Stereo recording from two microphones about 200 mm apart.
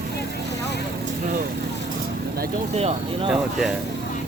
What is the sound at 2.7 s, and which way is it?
Speech, 30° right (ahead or behind).